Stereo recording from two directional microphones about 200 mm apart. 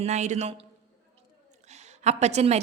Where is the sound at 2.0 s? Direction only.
35° right (ahead or behind).